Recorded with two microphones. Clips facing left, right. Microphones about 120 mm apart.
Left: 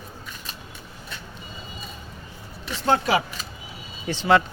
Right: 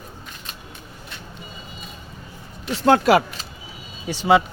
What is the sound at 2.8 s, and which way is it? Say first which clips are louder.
Speech: right 6 dB; 60° right (ahead or behind).